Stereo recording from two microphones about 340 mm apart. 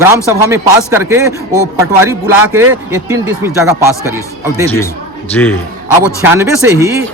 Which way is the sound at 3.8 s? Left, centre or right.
Centre.